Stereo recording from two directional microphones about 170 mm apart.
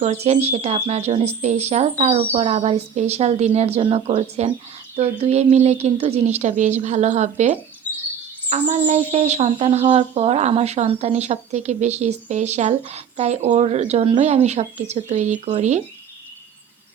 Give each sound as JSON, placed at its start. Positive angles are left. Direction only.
{"t": 0.0, "sound": "speech", "side_deg": -40}
{"t": 8.6, "sound": "speech", "side_deg": -35}